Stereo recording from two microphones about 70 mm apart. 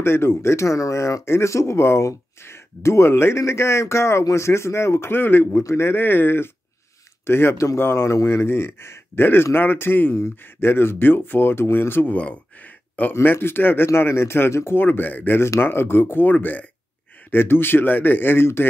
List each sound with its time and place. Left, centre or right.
0.0 s speech: left
5.6 s speech: left